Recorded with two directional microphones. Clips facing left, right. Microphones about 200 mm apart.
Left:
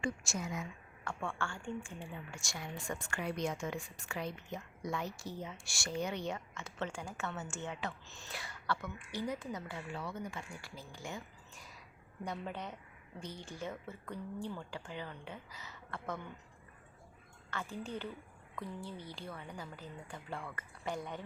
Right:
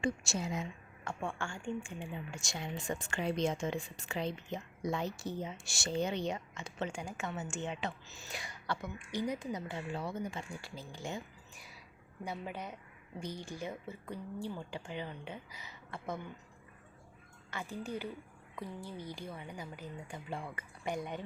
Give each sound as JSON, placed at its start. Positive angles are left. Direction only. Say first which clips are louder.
{"t": 0.0, "sound": "a woman's voice", "louder": "right 3 dB", "side_deg": -25}
{"t": 1.2, "sound": "a woman's voice", "louder": "right 1 dB", "side_deg": -15}
{"t": 8.0, "sound": "speech", "louder": "right 1 dB", "side_deg": -5}
{"t": 12.2, "sound": "speech", "louder": "even", "side_deg": -10}
{"t": 17.5, "sound": "speech", "louder": "right 1 dB", "side_deg": -10}